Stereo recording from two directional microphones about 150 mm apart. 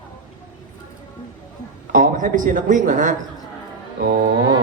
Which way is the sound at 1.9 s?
60° right (ahead or behind).